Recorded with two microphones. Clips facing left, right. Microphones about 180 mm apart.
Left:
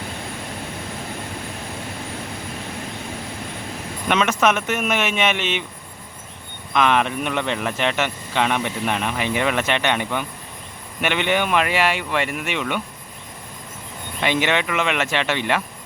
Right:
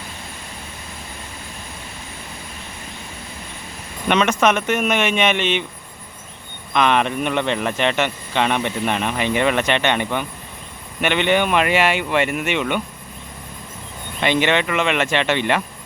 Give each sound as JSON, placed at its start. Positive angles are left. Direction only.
{"t": 4.1, "sound": "speech", "side_deg": 0}
{"t": 6.7, "sound": "speech", "side_deg": 0}
{"t": 14.2, "sound": "speech", "side_deg": 5}